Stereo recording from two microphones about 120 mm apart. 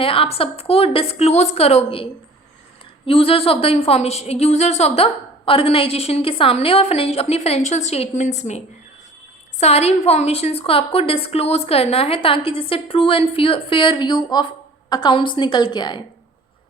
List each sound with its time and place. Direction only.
0.0 s a woman's voice: 50° left (ahead or behind)
3.1 s a woman's voice: 55° left (ahead or behind)
5.5 s a woman's voice: 50° left (ahead or behind)